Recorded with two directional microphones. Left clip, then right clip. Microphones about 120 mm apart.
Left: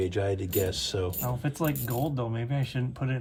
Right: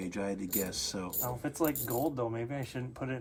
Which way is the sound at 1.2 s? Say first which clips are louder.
Left 3 dB; 25° right (ahead or behind).